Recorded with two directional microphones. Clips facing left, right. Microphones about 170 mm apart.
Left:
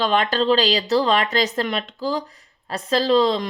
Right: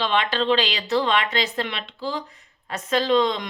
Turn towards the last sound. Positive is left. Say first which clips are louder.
# left 3 dB
turn(degrees=35)  # may be behind; listen again after turning